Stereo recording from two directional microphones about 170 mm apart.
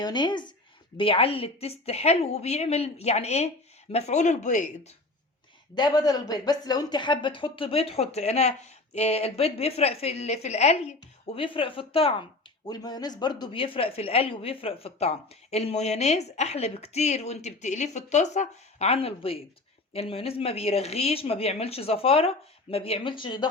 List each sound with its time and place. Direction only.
0.0 s a woman's voice: 25° left (ahead or behind); by 4.9 s 45° left (ahead or behind)
5.7 s a woman's voice: 25° left (ahead or behind)